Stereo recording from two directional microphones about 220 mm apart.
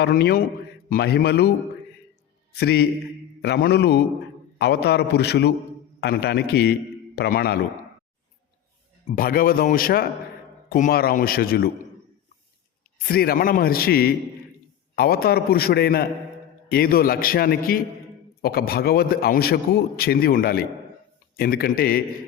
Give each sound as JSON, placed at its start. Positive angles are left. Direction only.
{"t": 0.0, "sound": "a man's voice", "side_deg": 45}
{"t": 9.0, "sound": "a man's voice", "side_deg": 40}
{"t": 13.1, "sound": "a man's voice", "side_deg": 45}